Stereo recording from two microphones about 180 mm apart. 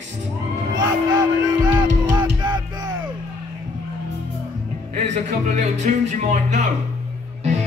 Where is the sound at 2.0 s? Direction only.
20° right (ahead or behind).